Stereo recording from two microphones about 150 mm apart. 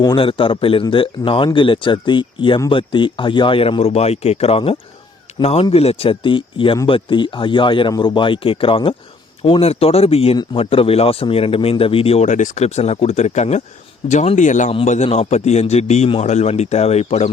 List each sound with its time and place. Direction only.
0.0 s a man's voice: 35° left (ahead or behind)